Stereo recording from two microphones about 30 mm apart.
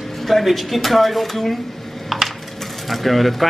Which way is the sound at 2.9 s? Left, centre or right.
Centre.